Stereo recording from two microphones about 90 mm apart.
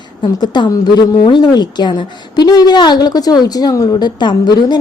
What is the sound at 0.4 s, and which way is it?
A woman's voice, 55° left (ahead or behind).